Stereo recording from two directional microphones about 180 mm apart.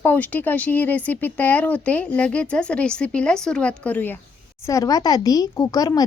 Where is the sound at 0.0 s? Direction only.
10° left (ahead or behind).